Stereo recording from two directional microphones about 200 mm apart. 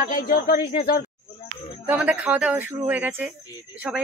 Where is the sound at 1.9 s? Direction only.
5° right (ahead or behind).